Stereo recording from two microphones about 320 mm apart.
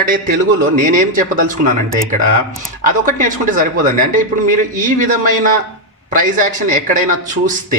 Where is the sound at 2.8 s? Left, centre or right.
Right.